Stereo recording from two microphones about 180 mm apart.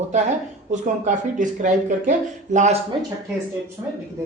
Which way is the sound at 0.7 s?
45° right (ahead or behind).